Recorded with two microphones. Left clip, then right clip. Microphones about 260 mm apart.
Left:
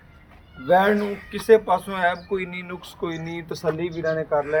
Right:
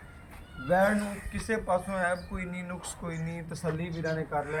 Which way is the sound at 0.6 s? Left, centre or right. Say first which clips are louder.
Left 8 dB; left.